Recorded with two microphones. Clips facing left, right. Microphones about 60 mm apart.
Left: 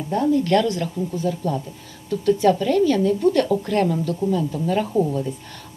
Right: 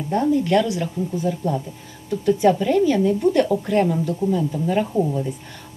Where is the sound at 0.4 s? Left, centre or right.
Centre.